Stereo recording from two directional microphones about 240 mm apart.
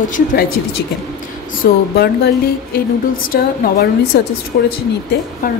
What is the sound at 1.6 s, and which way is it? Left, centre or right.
A woman's voice, left.